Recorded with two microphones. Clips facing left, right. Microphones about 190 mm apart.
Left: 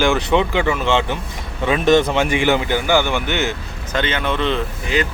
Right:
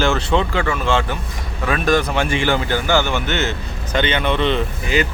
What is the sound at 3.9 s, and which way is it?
Speech, centre (ahead or behind).